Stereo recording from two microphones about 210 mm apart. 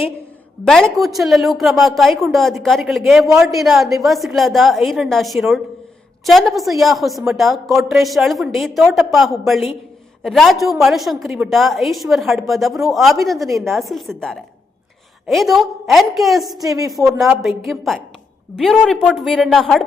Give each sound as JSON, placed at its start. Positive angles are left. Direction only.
{"t": 0.6, "sound": "a woman's voice", "side_deg": 0}
{"t": 16.6, "sound": "speech", "side_deg": -15}
{"t": 16.9, "sound": "a woman's voice", "side_deg": 0}